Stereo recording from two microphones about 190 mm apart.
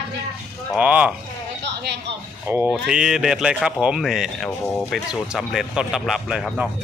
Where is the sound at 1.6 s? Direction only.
65° right (ahead or behind).